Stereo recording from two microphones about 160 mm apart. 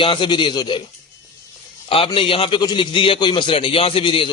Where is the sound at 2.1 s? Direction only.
35° left (ahead or behind).